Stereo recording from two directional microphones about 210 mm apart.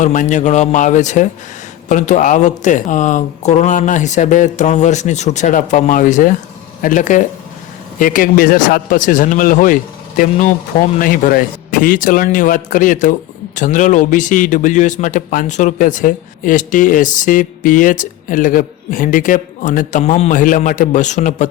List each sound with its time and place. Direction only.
0.0 s a man's voice: 35° left (ahead or behind)